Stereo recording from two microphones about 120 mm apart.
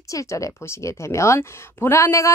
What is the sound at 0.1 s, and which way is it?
Speech, 25° left (ahead or behind).